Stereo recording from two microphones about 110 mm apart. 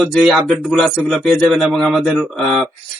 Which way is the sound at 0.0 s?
Centre (ahead or behind).